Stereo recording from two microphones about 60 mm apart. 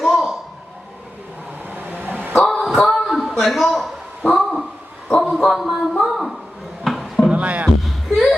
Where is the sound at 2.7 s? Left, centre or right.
Centre.